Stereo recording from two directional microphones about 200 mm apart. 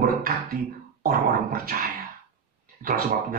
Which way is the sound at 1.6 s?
50° right (ahead or behind).